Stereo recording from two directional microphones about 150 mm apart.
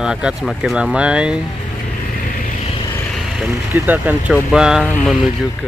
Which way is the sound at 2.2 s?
65° left (ahead or behind).